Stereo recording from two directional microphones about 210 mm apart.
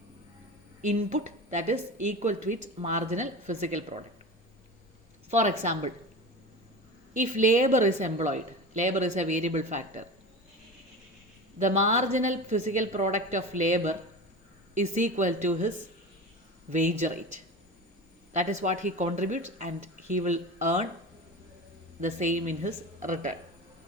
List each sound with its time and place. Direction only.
0.8 s a woman's voice: 35° right (ahead or behind)
5.3 s a woman's voice: 35° right (ahead or behind)
7.1 s a woman's voice: 35° right (ahead or behind)
11.6 s a woman's voice: 35° right (ahead or behind)
18.3 s a woman's voice: 35° right (ahead or behind)
22.0 s a woman's voice: 35° right (ahead or behind)